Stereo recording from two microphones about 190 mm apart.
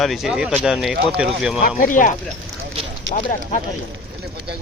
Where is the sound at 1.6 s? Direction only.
45° left (ahead or behind).